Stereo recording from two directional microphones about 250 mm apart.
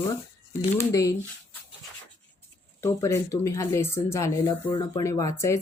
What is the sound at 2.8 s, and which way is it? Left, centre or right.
Speech, centre.